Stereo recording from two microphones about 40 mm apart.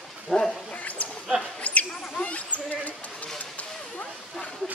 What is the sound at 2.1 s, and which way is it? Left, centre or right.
Basketball bounce, left.